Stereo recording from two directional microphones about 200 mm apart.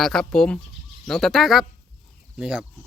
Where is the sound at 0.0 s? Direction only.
5° left (ahead or behind).